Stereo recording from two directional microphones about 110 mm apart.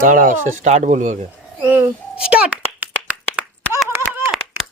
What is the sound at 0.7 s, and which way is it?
Speech, 90° right.